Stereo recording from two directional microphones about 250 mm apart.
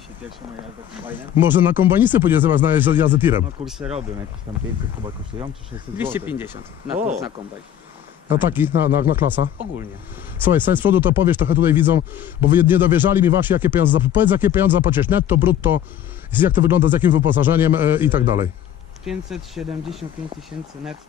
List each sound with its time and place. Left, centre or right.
1.0 s speech: centre
4.5 s speech: right
5.9 s speech: centre
8.4 s speech: centre
20.5 s speech: centre